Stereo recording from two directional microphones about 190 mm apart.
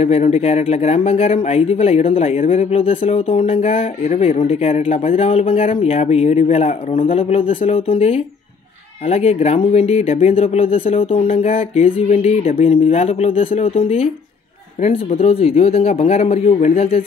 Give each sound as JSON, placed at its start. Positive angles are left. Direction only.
{"t": 0.0, "sound": "speech", "side_deg": 35}